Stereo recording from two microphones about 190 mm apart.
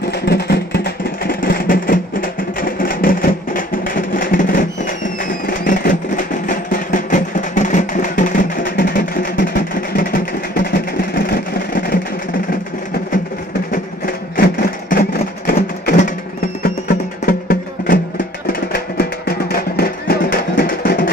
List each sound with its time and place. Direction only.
0.3 s vehicle: 55° left (ahead or behind)
2.6 s music: 50° left (ahead or behind)
11.2 s vehicle: 45° left (ahead or behind)
14.3 s music: 50° left (ahead or behind)